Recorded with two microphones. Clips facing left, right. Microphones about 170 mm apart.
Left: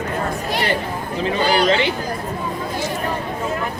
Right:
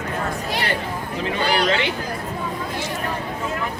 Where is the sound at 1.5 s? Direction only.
40° left (ahead or behind).